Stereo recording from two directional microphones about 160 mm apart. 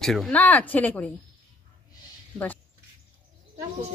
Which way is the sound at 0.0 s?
Centre (ahead or behind).